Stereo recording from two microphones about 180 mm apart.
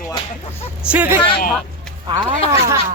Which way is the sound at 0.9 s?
10° right (ahead or behind).